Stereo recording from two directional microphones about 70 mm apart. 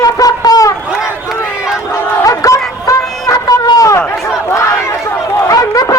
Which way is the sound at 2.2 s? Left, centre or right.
Left.